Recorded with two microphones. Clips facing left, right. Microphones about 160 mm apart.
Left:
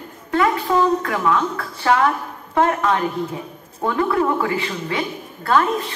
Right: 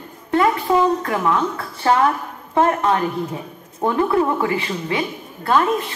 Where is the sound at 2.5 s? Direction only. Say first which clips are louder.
Right 1 dB; 25° right (ahead or behind).